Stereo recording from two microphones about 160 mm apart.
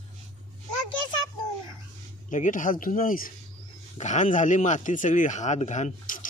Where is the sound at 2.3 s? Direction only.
55° left (ahead or behind).